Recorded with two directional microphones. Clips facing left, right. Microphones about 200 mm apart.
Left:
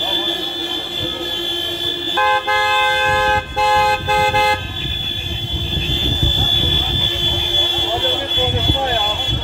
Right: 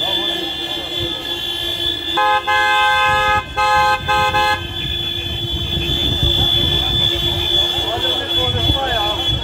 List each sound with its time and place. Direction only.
2.4 s vehicle: 15° left (ahead or behind)
3.0 s car: 25° left (ahead or behind)
4.1 s car: 35° left (ahead or behind)